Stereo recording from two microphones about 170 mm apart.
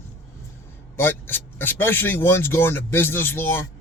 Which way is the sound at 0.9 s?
10° left (ahead or behind).